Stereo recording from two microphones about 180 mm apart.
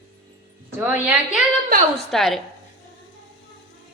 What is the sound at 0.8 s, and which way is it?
Speech, 10° right (ahead or behind).